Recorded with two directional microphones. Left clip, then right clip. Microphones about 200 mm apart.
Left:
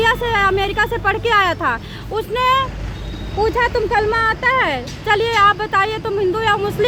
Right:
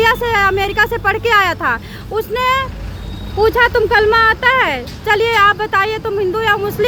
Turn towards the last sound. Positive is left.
turn(degrees=-10)  # may be behind; listen again after turning